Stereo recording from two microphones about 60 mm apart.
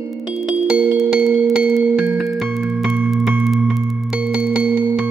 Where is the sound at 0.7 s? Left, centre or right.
Right.